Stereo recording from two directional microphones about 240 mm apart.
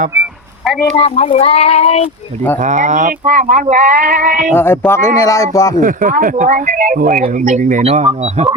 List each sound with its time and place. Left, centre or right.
0.1 s a sound: centre
0.9 s speech: left
2.6 s speech: right
4.5 s speech: centre
5.8 s speech: right